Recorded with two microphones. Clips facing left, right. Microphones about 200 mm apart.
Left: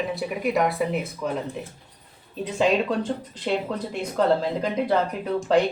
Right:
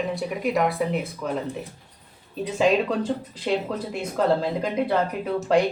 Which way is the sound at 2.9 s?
5° right (ahead or behind).